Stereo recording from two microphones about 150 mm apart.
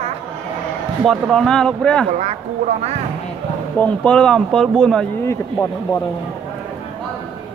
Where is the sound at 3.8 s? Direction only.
5° left (ahead or behind).